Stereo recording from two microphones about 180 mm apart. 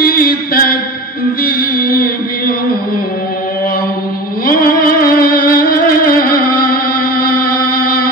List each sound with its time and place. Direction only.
0.0 s mantra: 55° left (ahead or behind)
1.4 s music: 55° left (ahead or behind)
4.5 s music: 55° left (ahead or behind)